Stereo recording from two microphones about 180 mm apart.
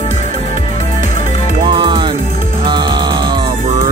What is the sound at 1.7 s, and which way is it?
Music, 25° right (ahead or behind).